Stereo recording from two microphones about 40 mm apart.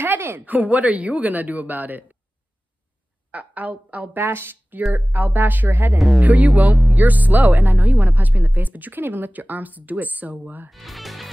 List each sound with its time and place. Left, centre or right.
0.0 s speech: right
0.5 s speech: right
3.3 s a woman's voice: right
4.2 s speech: right
4.9 s speech: right
5.9 s speech: centre
6.2 s speech: right
6.7 s music: centre
7.0 s speech: right
10.7 s speech: centre